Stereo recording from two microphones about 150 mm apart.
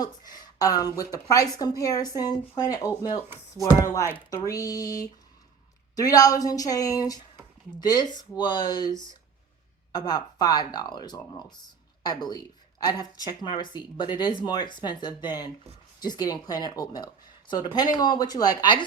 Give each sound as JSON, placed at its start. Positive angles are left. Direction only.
{"t": 0.0, "sound": "speech", "side_deg": 25}
{"t": 9.9, "sound": "speech", "side_deg": 25}